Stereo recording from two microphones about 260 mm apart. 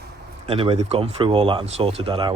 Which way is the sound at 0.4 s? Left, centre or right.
Right.